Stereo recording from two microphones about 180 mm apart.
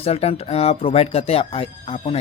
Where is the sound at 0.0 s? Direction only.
35° left (ahead or behind).